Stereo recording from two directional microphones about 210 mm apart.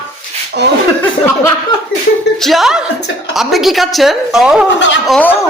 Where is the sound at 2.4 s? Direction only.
Centre (ahead or behind).